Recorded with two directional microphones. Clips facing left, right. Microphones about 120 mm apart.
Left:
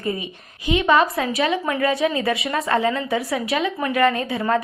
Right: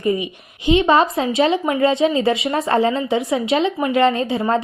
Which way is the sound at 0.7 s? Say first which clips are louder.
Right 3 dB; 30° right (ahead or behind).